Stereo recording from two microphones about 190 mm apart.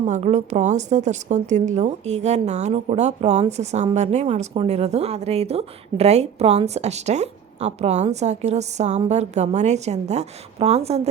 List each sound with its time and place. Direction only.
0.0 s a woman's voice: 35° right (ahead or behind)